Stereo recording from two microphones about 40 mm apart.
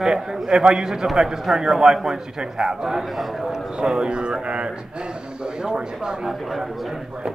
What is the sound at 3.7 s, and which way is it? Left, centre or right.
A man's voice, centre.